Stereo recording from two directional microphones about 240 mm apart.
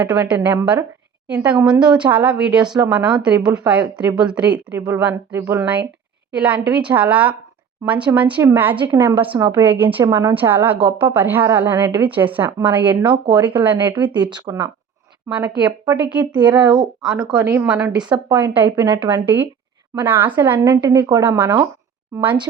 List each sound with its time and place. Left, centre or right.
0.0 s a woman's voice: centre
13.0 s speech: centre
13.4 s a woman's voice: centre
14.0 s a woman's voice: centre
16.4 s a woman's voice: centre